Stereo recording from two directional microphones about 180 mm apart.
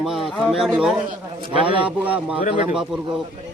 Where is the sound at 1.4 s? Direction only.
30° right (ahead or behind).